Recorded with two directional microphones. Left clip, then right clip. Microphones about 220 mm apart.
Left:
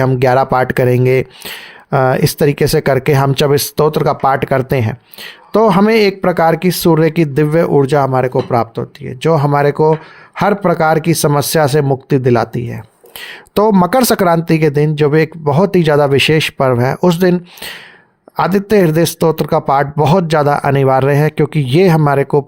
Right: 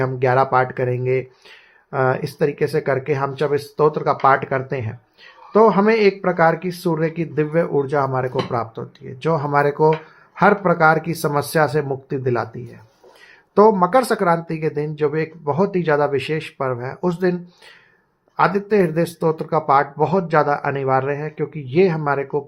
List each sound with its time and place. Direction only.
0.0 s speech: 55° left (ahead or behind)